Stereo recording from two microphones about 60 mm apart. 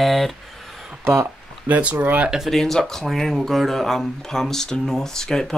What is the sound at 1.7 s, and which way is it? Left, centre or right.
Speech, right.